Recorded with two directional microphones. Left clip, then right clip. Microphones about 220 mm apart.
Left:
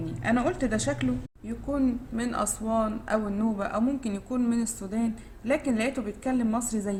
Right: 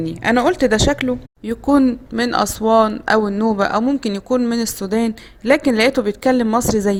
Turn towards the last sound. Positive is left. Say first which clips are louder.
# right 14 dB
turn(degrees=-45)  # may be behind; listen again after turning